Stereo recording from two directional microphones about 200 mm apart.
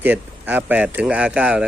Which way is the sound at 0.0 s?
10° right (ahead or behind).